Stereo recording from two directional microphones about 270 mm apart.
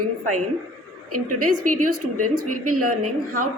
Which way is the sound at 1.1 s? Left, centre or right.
Right.